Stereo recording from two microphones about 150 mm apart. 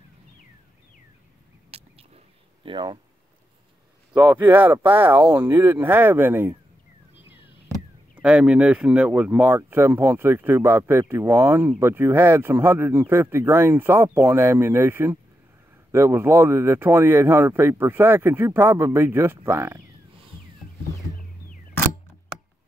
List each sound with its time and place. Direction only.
1.7 s a sound: 45° right (ahead or behind)
4.1 s speech: 10° right (ahead or behind)
7.7 s speech: 5° right (ahead or behind)